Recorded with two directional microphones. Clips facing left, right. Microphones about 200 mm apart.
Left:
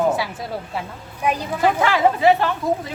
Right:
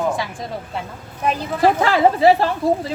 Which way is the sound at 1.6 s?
35° right (ahead or behind).